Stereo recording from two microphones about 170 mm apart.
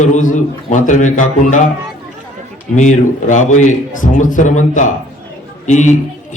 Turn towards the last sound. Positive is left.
turn(degrees=45)  # may be behind; listen again after turning